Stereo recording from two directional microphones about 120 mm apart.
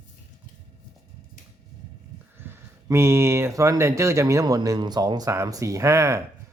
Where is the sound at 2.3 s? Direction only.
20° right (ahead or behind).